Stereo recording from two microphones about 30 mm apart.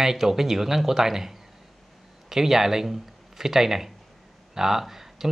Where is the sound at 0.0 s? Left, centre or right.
Centre.